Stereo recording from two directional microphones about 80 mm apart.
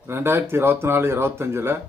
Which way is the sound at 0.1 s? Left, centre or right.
Right.